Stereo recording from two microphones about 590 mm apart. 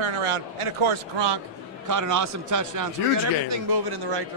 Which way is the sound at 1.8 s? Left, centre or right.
Right.